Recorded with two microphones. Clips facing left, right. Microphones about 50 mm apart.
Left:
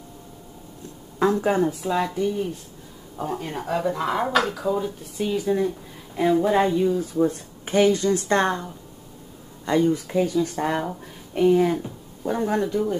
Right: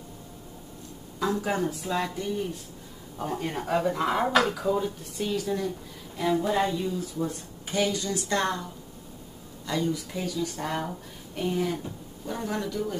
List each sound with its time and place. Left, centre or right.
1.2 s speech: left
1.7 s speech: centre
5.3 s a woman's voice: centre; by 8.5 s left
9.7 s a woman's voice: left